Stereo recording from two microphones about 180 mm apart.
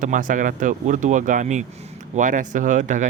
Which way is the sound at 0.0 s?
50° right (ahead or behind).